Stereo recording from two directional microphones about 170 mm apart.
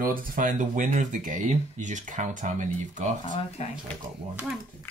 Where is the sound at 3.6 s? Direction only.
40° left (ahead or behind).